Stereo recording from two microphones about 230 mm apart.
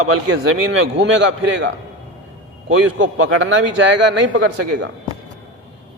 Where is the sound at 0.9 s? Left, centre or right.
Right.